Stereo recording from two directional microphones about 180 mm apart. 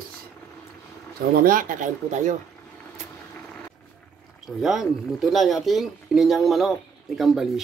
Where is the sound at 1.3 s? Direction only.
50° right (ahead or behind).